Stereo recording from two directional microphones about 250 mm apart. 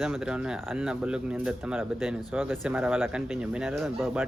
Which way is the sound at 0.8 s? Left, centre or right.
Centre.